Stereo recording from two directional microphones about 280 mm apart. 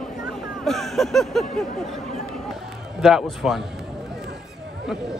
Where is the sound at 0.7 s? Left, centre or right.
Centre.